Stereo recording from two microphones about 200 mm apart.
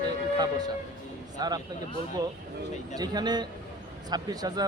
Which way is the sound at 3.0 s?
20° right (ahead or behind).